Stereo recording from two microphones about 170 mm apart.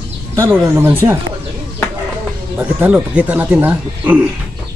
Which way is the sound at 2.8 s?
10° right (ahead or behind).